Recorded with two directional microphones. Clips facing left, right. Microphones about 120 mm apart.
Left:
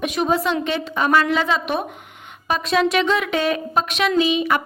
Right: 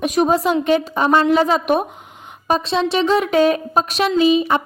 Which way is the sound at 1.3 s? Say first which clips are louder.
Right 5 dB; 40° right (ahead or behind).